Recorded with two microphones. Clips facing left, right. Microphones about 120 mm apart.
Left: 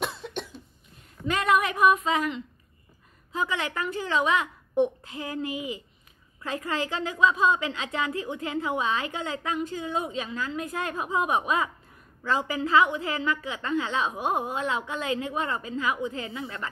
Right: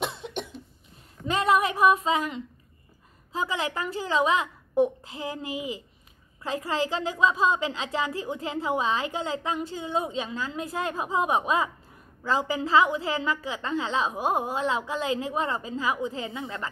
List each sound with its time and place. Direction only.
0.2 s cough: 15° right (ahead or behind)
1.2 s a woman's voice: 30° right (ahead or behind)